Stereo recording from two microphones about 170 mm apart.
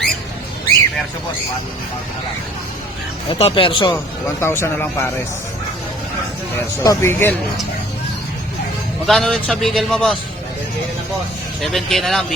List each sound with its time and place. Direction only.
3.2 s speech: 30° left (ahead or behind)
3.9 s speech: 15° left (ahead or behind)
6.7 s speech: 15° left (ahead or behind)
9.0 s a man's voice: centre (ahead or behind)
11.6 s a man's voice: centre (ahead or behind)